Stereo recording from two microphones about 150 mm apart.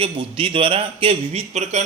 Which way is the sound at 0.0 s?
35° right (ahead or behind).